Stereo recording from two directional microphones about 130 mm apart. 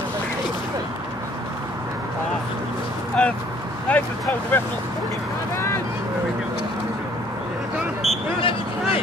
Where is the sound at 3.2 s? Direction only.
5° left (ahead or behind).